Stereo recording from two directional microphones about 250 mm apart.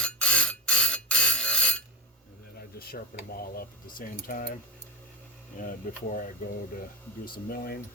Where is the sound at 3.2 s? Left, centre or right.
Left.